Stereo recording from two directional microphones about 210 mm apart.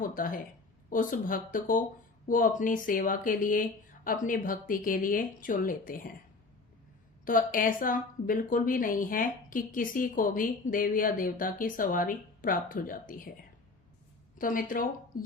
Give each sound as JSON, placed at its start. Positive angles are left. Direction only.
{"t": 0.0, "sound": "a woman's voice", "side_deg": 40}
{"t": 7.3, "sound": "a woman's voice", "side_deg": 40}
{"t": 14.3, "sound": "a woman's voice", "side_deg": 40}